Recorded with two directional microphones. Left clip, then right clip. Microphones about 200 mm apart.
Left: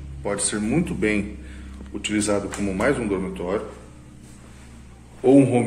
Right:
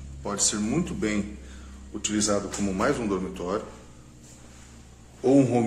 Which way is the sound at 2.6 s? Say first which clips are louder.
Left 4 dB; 25° right (ahead or behind).